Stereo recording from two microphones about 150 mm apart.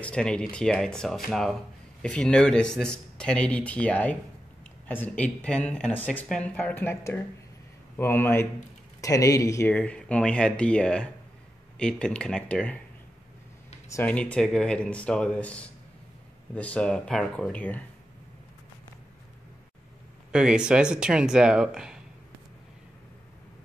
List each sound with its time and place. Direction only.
0.0 s speech: 5° left (ahead or behind)
13.8 s speech: 20° left (ahead or behind)
14.1 s speech: 5° left (ahead or behind)
20.2 s speech: 5° right (ahead or behind)